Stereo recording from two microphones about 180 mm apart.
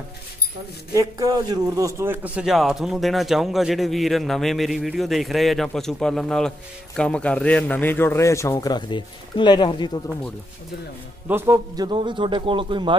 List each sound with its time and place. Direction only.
0.9 s a man's voice: 20° right (ahead or behind); by 9.9 s 25° left (ahead or behind)
11.2 s a man's voice: 15° right (ahead or behind)